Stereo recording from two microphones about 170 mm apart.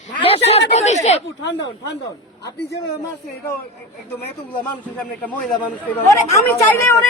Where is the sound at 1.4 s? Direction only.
90° left.